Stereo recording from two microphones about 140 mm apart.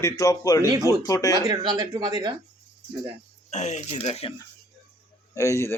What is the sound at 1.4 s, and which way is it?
Speech, 30° right (ahead or behind).